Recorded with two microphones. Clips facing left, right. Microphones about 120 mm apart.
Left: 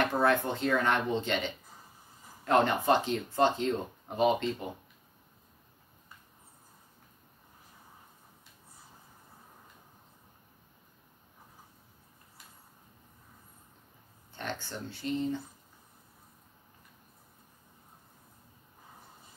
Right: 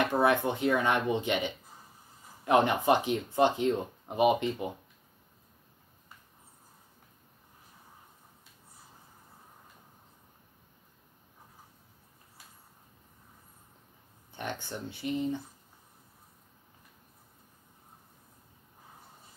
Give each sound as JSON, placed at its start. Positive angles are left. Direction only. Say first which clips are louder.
{"t": 0.0, "sound": "speech", "louder": "right 1 dB", "side_deg": -15}
{"t": 14.3, "sound": "speech", "louder": "right 1 dB", "side_deg": -15}